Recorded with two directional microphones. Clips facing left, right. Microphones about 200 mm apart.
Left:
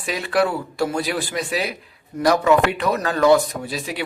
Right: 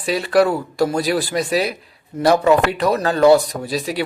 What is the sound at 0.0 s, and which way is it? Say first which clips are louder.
Speech: right 5 dB; 35° right (ahead or behind).